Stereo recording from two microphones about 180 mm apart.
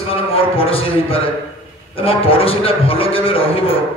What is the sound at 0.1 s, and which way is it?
A man's voice, 30° left (ahead or behind).